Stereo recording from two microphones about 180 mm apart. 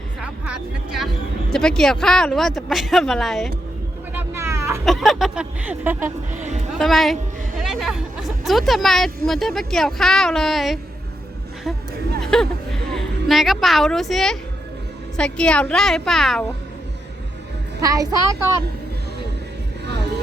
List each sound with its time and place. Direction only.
0.2 s speech: 5° right (ahead or behind)
4.1 s vehicle: 10° right (ahead or behind)
4.9 s a woman's voice: centre (ahead or behind)
6.3 s speech: 40° right (ahead or behind)
6.7 s a woman's voice: centre (ahead or behind)
12.2 s a sound: 5° left (ahead or behind)
12.9 s a woman's voice: centre (ahead or behind)
17.7 s a woman's voice: 20° right (ahead or behind)
19.8 s music: 70° right (ahead or behind)